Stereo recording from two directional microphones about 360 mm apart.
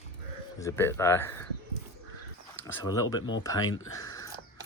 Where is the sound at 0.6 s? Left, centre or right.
Centre.